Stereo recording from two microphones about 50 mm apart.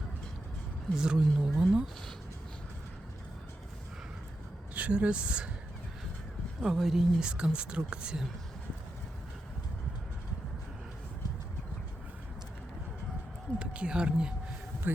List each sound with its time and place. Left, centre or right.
0.9 s a woman's voice: centre
1.5 s a woman's voice: centre
4.7 s speech: right
6.6 s a woman's voice: centre
7.2 s a woman's voice: centre
13.6 s speech: right
14.8 s speech: right